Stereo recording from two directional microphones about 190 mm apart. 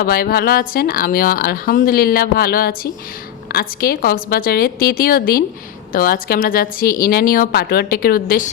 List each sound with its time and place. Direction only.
0.0 s speech: 55° left (ahead or behind)